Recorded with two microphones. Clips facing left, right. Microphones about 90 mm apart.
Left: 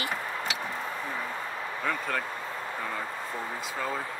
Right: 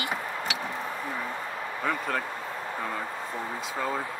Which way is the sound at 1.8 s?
10° right (ahead or behind).